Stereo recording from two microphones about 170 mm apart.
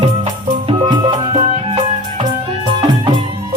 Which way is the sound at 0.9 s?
30° right (ahead or behind).